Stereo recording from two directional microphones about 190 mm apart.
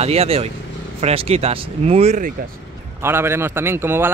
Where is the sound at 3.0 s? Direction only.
15° right (ahead or behind).